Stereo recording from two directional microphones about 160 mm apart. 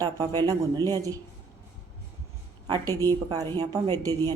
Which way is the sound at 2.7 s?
25° right (ahead or behind).